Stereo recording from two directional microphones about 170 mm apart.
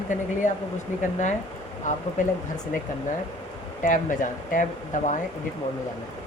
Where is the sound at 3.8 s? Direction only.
50° left (ahead or behind).